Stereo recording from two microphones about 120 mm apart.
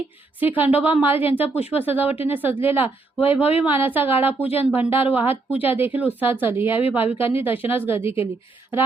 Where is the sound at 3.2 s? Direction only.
55° left (ahead or behind).